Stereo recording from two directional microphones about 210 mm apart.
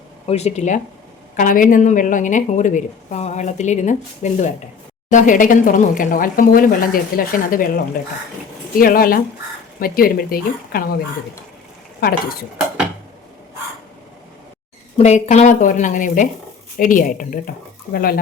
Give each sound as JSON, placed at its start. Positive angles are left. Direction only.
{"t": 0.3, "sound": "a woman's voice", "side_deg": 30}
{"t": 8.8, "sound": "speech", "side_deg": 45}
{"t": 14.9, "sound": "a woman's voice", "side_deg": 30}